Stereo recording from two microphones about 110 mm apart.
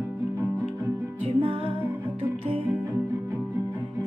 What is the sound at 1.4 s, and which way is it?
Music, 60° right (ahead or behind).